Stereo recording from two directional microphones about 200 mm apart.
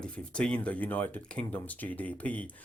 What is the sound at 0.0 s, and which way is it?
Speech, 5° left (ahead or behind).